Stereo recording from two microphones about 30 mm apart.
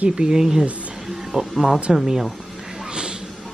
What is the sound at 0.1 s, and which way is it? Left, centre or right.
Speech, right.